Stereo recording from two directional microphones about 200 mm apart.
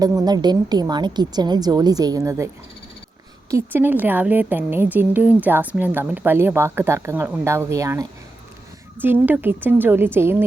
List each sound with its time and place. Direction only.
0.0 s a woman's voice: 20° right (ahead or behind)
3.5 s a woman's voice: 10° right (ahead or behind)